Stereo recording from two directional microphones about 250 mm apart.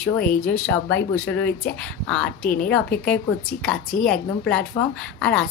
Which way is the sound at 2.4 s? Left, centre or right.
Left.